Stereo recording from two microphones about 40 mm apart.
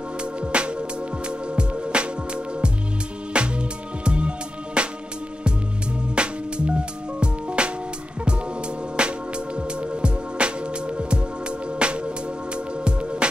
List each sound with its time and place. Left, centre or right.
0.2 s music: right
6.1 s music: right
9.0 s music: right